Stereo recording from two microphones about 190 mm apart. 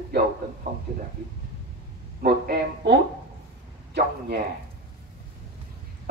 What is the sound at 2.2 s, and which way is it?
Speech, 55° right (ahead or behind).